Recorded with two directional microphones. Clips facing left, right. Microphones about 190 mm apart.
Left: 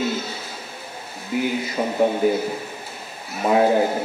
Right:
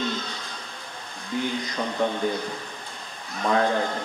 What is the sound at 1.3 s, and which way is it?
Speech, 10° left (ahead or behind).